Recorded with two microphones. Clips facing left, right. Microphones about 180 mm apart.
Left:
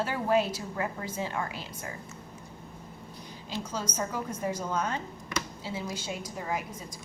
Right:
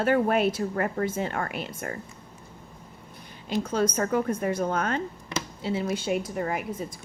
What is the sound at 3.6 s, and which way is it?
A woman's voice, 60° right (ahead or behind).